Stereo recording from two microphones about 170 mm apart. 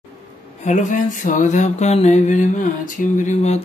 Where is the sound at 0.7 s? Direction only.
45° left (ahead or behind).